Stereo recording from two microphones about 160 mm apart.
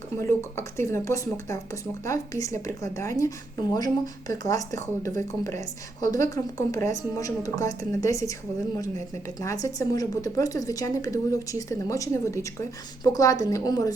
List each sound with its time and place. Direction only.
0.2 s a woman's voice: 15° left (ahead or behind)
9.4 s a woman's voice: 20° left (ahead or behind)